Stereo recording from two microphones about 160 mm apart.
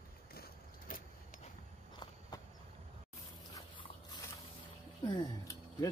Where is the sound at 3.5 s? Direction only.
25° left (ahead or behind).